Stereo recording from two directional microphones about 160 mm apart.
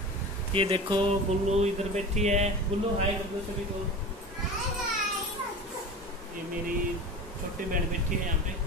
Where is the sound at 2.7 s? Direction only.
35° right (ahead or behind).